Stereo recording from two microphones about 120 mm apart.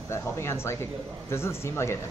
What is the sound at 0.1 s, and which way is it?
Speech, 25° left (ahead or behind).